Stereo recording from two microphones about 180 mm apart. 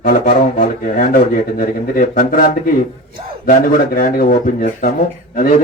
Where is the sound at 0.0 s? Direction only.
50° left (ahead or behind).